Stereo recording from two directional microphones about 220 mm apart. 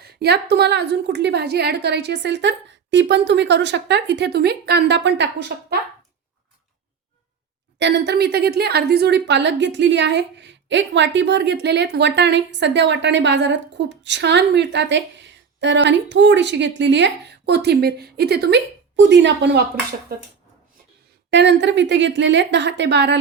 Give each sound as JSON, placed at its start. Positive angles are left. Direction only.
{"t": 0.0, "sound": "a woman's voice", "side_deg": -45}
{"t": 7.8, "sound": "a woman's voice", "side_deg": -50}
{"t": 21.2, "sound": "a woman's voice", "side_deg": -50}